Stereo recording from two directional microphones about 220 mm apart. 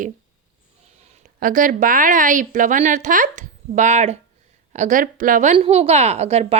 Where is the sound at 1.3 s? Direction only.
40° right (ahead or behind).